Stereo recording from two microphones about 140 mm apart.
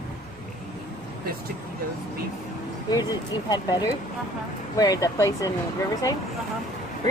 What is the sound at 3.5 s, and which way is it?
Speech, 30° left (ahead or behind).